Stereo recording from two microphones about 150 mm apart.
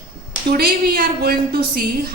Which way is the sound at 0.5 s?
85° right.